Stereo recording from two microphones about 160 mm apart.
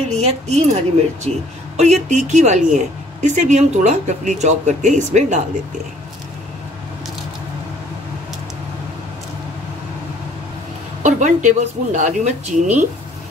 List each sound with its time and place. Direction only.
0.1 s a woman's voice: 45° right (ahead or behind)
11.0 s a woman's voice: 50° right (ahead or behind)